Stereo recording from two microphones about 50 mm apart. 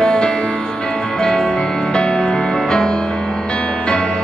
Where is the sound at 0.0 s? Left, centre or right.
Centre.